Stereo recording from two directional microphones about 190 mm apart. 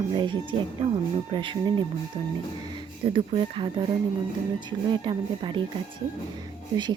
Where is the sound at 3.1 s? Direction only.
25° right (ahead or behind).